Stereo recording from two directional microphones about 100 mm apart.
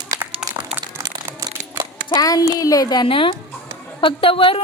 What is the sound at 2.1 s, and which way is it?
Speech, 40° left (ahead or behind).